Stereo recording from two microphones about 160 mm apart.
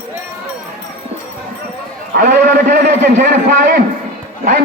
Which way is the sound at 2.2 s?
90° right.